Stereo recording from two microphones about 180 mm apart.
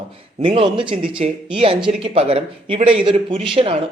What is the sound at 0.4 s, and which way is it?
Speech, 30° right (ahead or behind).